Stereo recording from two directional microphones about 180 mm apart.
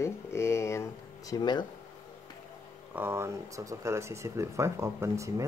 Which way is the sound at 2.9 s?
10° right (ahead or behind).